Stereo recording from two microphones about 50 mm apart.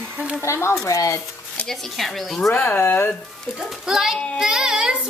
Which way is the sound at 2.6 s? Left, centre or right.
Left.